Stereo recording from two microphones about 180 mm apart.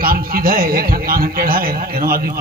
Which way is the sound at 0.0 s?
55° right (ahead or behind).